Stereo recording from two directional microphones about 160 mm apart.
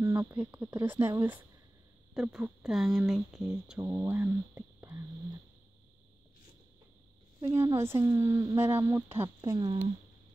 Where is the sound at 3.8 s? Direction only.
15° right (ahead or behind).